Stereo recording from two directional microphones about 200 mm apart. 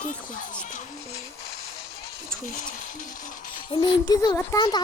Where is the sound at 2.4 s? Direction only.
45° left (ahead or behind).